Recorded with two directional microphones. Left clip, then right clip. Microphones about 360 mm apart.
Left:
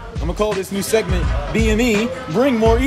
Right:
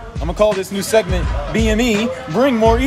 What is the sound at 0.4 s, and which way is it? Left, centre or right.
A man's voice, centre.